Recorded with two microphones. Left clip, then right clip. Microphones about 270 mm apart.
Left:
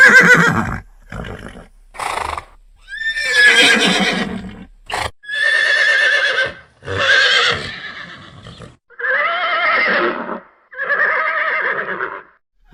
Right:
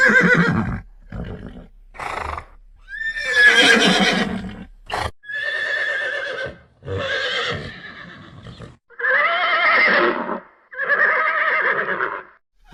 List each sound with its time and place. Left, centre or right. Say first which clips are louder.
0.0 s neigh: left 7 dB; left; by 5.1 s centre
5.4 s neigh: left 9 dB; left; by 12.3 s centre